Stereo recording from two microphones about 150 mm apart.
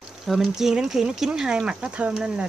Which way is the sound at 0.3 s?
Centre (ahead or behind).